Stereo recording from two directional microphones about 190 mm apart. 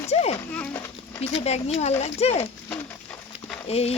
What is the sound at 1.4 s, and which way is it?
Speech, 35° left (ahead or behind).